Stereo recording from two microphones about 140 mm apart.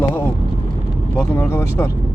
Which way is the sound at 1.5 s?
20° left (ahead or behind).